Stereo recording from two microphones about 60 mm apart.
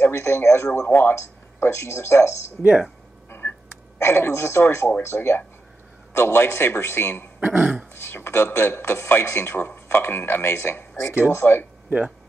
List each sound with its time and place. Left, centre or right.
0.0 s speech: left
3.3 s a sound: left
4.0 s a man's voice: left
7.4 s speech: right
7.9 s a man's voice: left